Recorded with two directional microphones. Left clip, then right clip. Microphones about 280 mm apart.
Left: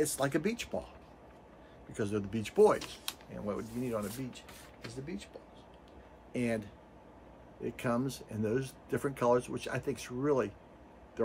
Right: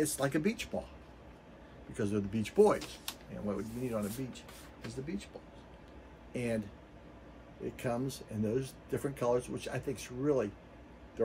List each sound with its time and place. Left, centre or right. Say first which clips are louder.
0.0 s speech: left 1 dB; centre
2.0 s speech: even; centre
6.3 s speech: left 1 dB; centre
7.7 s speech: left 2 dB; centre